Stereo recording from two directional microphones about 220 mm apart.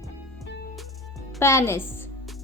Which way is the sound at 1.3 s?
15° left (ahead or behind).